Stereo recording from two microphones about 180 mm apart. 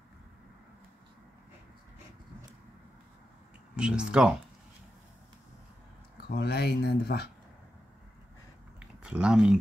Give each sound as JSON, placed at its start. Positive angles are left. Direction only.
{"t": 3.7, "sound": "speech", "side_deg": -5}
{"t": 6.2, "sound": "speech", "side_deg": 65}
{"t": 8.7, "sound": "a sound", "side_deg": -5}